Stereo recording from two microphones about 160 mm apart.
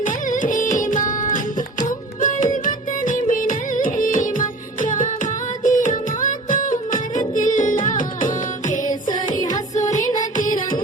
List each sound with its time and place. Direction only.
0.0 s music: 55° left (ahead or behind)
2.2 s music of bollywood: 55° left (ahead or behind)
7.3 s music: 55° left (ahead or behind)
9.4 s music: 20° left (ahead or behind)
10.3 s music: 60° left (ahead or behind)